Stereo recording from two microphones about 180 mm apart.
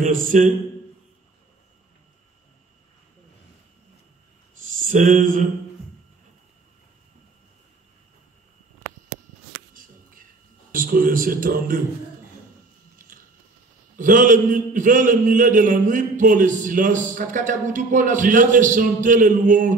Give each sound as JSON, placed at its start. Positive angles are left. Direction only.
{"t": 0.0, "sound": "a man's voice", "side_deg": -45}
{"t": 4.8, "sound": "a man's voice", "side_deg": -45}
{"t": 10.7, "sound": "speech", "side_deg": -50}
{"t": 13.9, "sound": "a man's voice", "side_deg": -45}